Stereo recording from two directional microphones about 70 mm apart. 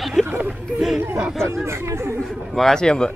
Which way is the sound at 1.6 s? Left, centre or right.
Right.